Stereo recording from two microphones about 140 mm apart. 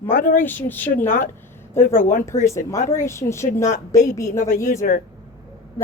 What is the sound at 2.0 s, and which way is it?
Speech, 65° left (ahead or behind).